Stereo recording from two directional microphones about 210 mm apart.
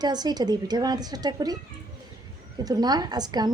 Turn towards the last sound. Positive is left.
turn(degrees=-20)  # may be behind; listen again after turning